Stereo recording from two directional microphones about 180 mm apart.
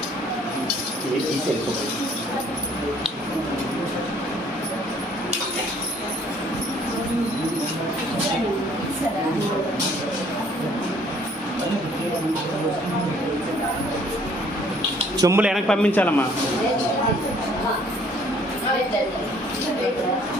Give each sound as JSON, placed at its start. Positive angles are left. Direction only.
{"t": 15.2, "sound": "speech", "side_deg": -15}
{"t": 15.4, "sound": "a man's voice", "side_deg": 0}